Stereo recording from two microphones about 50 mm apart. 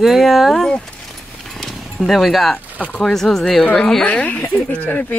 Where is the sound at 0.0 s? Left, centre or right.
Centre.